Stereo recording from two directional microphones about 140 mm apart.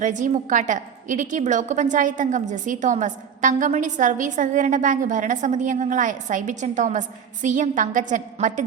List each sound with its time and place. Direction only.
0.0 s a woman's voice: 65° right (ahead or behind)